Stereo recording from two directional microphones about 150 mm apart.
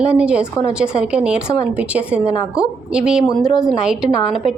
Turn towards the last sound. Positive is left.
turn(degrees=-5)  # may be behind; listen again after turning